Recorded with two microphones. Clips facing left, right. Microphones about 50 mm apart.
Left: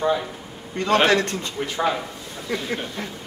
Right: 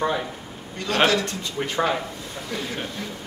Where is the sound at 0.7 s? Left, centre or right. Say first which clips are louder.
Left 3 dB; left.